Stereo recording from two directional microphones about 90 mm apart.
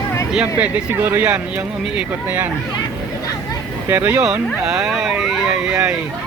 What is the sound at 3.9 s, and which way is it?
Speech, 25° right (ahead or behind).